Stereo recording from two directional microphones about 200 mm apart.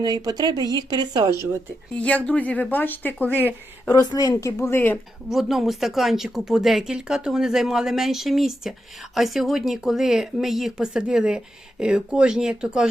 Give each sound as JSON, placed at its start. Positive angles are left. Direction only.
{"t": 0.0, "sound": "speech", "side_deg": -20}
{"t": 1.9, "sound": "speech", "side_deg": 5}
{"t": 5.3, "sound": "speech", "side_deg": 0}